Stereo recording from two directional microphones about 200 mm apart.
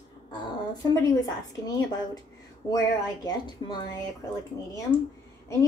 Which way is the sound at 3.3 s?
20° left (ahead or behind).